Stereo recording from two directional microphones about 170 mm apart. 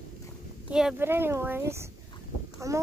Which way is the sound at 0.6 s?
5° right (ahead or behind).